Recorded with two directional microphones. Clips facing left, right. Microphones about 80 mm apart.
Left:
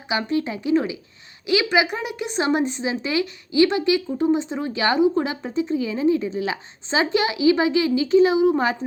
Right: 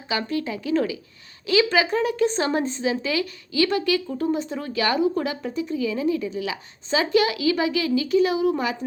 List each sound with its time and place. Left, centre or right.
0.1 s a woman's voice: left